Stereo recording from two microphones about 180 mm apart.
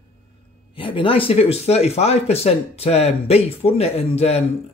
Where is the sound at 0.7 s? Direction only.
30° left (ahead or behind).